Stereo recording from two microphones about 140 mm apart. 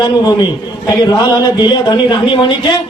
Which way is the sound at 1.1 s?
30° left (ahead or behind).